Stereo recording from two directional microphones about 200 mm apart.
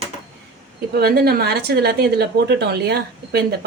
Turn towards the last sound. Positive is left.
turn(degrees=-50)  # may be behind; listen again after turning